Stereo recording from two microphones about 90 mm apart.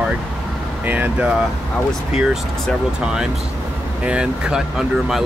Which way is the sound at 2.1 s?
10° right (ahead or behind).